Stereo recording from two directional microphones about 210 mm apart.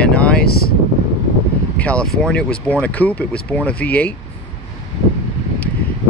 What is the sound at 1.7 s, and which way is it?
Speech, 5° left (ahead or behind).